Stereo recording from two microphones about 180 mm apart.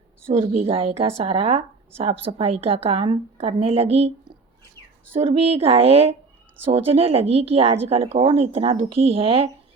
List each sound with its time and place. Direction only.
0.3 s a woman's voice: 35° right (ahead or behind)
5.1 s a woman's voice: 30° right (ahead or behind)